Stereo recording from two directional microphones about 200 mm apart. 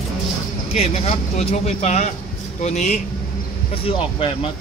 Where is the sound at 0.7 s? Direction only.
30° left (ahead or behind).